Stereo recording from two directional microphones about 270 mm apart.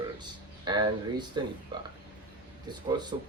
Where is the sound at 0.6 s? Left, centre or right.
Centre.